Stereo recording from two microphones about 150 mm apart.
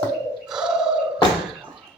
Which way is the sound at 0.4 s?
5° right (ahead or behind).